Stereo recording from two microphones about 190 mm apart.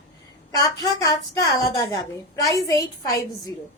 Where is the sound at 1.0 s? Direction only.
20° left (ahead or behind).